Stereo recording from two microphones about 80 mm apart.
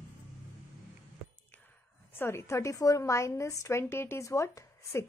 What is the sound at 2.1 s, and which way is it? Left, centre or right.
A woman's voice, left.